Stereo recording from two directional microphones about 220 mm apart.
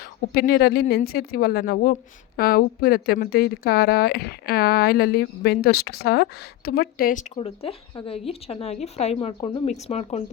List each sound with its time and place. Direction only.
0.3 s speech: 45° left (ahead or behind)
7.3 s a woman's voice: 25° left (ahead or behind)